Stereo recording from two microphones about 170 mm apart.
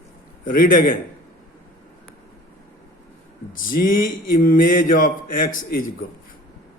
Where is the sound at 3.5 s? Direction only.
55° left (ahead or behind).